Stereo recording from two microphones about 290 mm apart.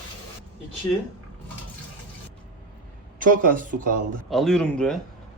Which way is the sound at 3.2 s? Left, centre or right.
Right.